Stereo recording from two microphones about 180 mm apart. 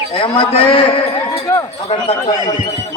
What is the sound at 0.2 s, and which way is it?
A man's voice, 30° left (ahead or behind).